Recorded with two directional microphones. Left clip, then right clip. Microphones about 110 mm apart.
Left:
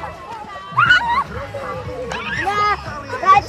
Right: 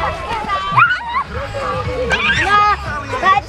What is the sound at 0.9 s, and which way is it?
Music, 15° left (ahead or behind).